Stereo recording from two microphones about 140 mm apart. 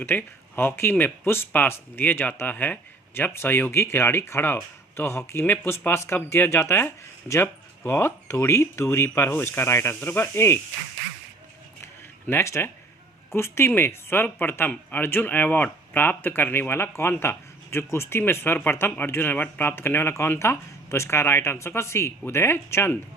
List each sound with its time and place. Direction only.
0.0 s speech: 15° left (ahead or behind)
12.3 s speech: 20° left (ahead or behind)